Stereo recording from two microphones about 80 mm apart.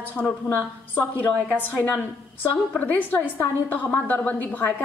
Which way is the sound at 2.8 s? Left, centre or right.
Left.